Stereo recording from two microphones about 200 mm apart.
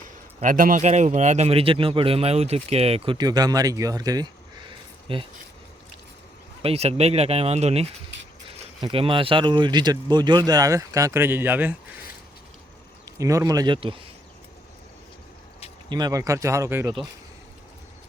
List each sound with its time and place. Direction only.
0.3 s a man's voice: 40° right (ahead or behind); by 5.2 s 25° right (ahead or behind)
6.6 s a man's voice: 30° right (ahead or behind); by 11.7 s 10° right (ahead or behind)
13.1 s speech: 15° right (ahead or behind)
15.9 s speech: 20° right (ahead or behind)